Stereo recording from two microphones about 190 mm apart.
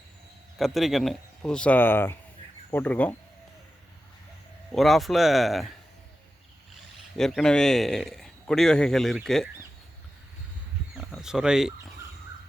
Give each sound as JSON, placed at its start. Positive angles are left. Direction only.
{"t": 0.6, "sound": "speech", "side_deg": 0}
{"t": 4.7, "sound": "speech", "side_deg": 0}
{"t": 7.2, "sound": "speech", "side_deg": 5}
{"t": 10.9, "sound": "a sound", "side_deg": 0}